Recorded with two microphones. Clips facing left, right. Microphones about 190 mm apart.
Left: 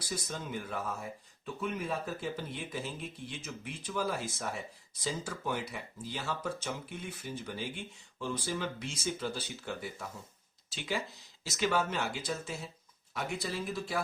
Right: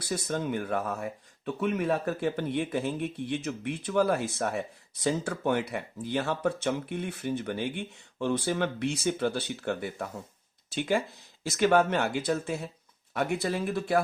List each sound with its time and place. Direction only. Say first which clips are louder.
0.0 s speech: right 8 dB; 60° right (ahead or behind)